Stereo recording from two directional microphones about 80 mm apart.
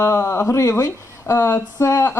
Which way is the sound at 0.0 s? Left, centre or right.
Left.